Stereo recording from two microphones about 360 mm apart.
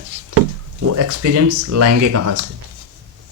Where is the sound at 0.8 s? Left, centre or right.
Right.